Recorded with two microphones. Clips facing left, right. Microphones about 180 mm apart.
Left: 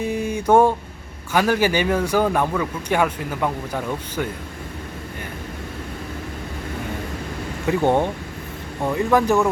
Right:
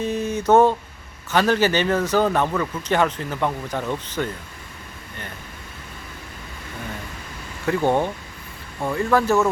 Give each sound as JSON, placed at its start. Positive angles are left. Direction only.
{"t": 0.0, "sound": "a sound", "side_deg": 10}
{"t": 1.3, "sound": "a man's voice", "side_deg": 10}
{"t": 7.7, "sound": "a man's voice", "side_deg": 15}